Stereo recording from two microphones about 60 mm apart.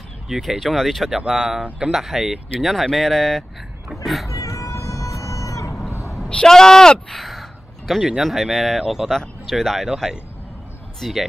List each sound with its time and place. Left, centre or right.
0.3 s speech: centre
1.2 s speech: centre
4.3 s music: left
5.9 s a sound: left
6.4 s speech: centre
9.1 s speech: centre
11.0 s speech: centre